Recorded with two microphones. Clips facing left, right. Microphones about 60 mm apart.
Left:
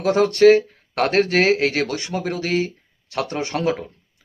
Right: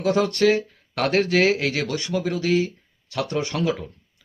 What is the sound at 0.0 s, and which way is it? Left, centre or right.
Speech, left.